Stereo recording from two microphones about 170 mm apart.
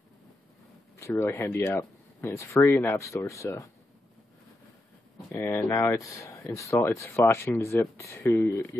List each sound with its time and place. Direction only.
0.9 s speech: 15° left (ahead or behind)
5.3 s speech: 15° left (ahead or behind)